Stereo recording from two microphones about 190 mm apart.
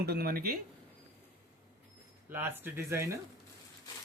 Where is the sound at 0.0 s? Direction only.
55° right (ahead or behind).